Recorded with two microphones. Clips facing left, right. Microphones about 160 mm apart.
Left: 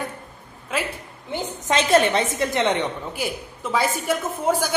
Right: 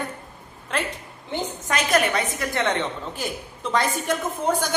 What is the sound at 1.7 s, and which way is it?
A woman's voice, 25° left (ahead or behind).